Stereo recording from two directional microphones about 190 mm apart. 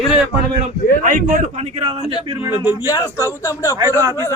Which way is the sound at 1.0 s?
45° right (ahead or behind).